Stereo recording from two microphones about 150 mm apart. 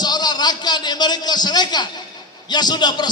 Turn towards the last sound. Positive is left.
turn(degrees=30)  # may be behind; listen again after turning